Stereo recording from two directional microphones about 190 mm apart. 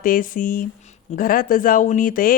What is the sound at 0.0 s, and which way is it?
Speech, 45° left (ahead or behind).